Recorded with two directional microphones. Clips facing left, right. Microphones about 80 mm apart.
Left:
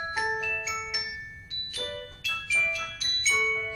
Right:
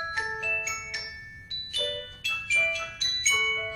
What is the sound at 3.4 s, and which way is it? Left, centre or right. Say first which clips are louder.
Music: left 1 dB; right.